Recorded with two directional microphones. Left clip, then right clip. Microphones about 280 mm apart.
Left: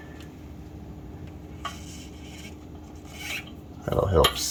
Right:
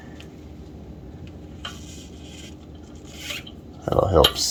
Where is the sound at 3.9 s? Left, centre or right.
Centre.